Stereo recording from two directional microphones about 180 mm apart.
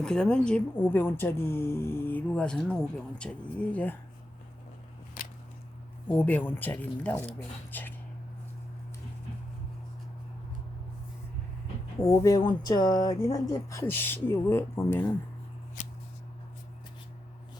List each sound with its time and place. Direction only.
0.0 s speech: 5° left (ahead or behind)
5.2 s a sound: 50° left (ahead or behind)
6.1 s speech: 10° left (ahead or behind)
12.0 s speech: 15° left (ahead or behind)